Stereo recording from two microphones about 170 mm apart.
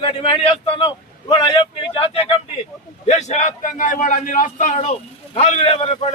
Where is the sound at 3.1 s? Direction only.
40° left (ahead or behind).